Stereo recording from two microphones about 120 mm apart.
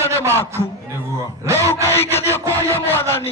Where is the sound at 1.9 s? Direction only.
20° left (ahead or behind).